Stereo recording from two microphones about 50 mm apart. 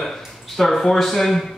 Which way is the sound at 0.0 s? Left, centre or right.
Centre.